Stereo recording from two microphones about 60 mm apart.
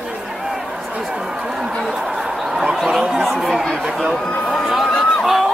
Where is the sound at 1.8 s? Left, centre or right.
Centre.